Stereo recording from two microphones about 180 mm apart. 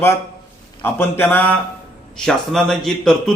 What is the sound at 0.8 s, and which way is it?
A man's voice, 10° left (ahead or behind).